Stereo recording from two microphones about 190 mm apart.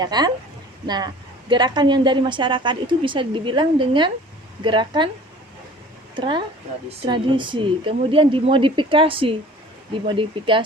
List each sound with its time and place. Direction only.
0.0 s a woman's voice: 20° right (ahead or behind)
6.1 s a woman's voice: 25° right (ahead or behind)